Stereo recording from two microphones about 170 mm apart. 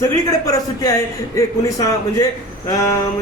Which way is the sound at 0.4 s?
20° left (ahead or behind).